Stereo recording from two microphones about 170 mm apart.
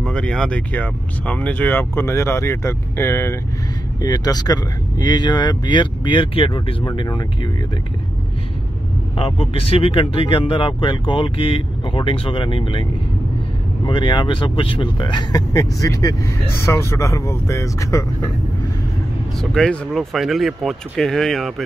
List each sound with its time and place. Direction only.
0.0 s speech: 5° left (ahead or behind); by 7.2 s 25° left (ahead or behind)
9.1 s speech: 30° left (ahead or behind)
13.8 s speech: 30° left (ahead or behind)
19.5 s speech: 5° left (ahead or behind)